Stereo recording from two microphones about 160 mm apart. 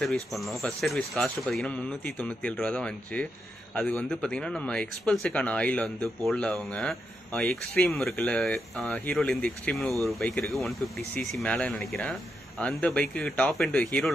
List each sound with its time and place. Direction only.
0.0 s speech: centre (ahead or behind)